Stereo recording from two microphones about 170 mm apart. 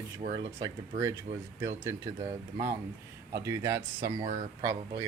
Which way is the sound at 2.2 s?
35° right (ahead or behind).